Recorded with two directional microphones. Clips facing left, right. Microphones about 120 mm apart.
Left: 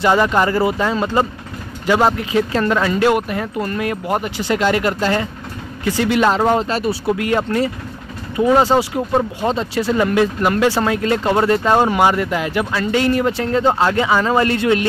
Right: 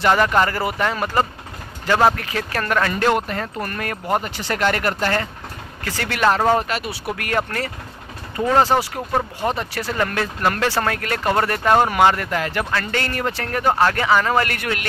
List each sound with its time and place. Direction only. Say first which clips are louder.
0.0 s speech: left 2 dB; 15° left (ahead or behind)
6.7 s speech: left 7 dB; 30° left (ahead or behind)
7.2 s speech: left 6 dB; 20° left (ahead or behind)